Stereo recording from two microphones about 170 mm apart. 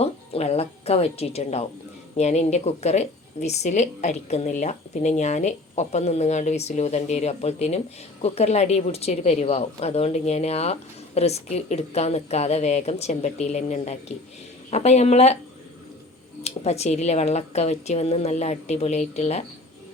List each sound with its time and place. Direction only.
0.0 s a woman's voice: 35° left (ahead or behind)
16.4 s a woman's voice: 40° left (ahead or behind)